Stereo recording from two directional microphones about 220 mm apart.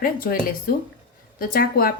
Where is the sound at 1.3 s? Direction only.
40° left (ahead or behind).